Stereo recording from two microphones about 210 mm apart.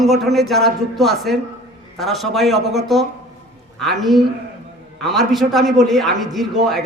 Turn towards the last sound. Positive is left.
turn(degrees=0)  # may be behind; listen again after turning